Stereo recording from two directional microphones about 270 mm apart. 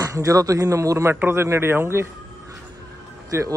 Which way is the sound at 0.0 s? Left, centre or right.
Centre.